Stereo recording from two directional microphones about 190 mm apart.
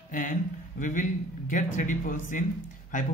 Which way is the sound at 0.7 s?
45° left (ahead or behind).